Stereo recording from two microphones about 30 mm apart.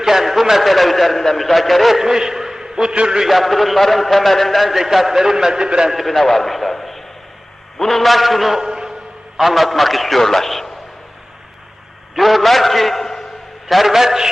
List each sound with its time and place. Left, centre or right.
0.0 s a man's voice: centre
2.0 s a man's voice: centre
3.2 s a man's voice: centre
4.7 s a man's voice: centre; by 5.9 s right
5.9 s a man's voice: centre
8.5 s a sound: centre
9.4 s a man's voice: centre
12.1 s a man's voice: centre
13.7 s a man's voice: centre